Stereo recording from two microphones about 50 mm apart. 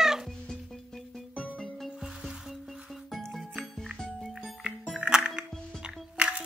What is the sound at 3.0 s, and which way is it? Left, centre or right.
Music, centre.